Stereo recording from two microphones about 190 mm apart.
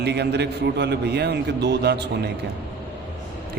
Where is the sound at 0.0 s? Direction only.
60° right (ahead or behind).